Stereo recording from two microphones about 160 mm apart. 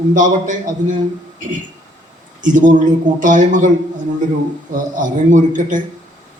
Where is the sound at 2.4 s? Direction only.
55° right (ahead or behind).